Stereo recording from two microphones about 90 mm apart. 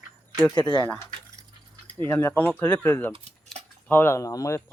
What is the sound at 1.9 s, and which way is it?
Speech, 25° left (ahead or behind).